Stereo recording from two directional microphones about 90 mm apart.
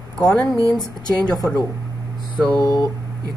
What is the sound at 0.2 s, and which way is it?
A woman's voice, 10° left (ahead or behind).